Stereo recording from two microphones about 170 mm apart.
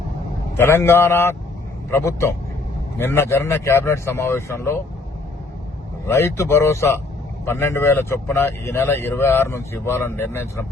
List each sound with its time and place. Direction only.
0.5 s speech: 15° left (ahead or behind)
6.1 s speech: 15° left (ahead or behind)